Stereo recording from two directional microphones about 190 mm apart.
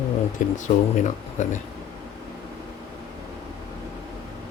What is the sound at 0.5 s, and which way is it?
Speech, 40° left (ahead or behind).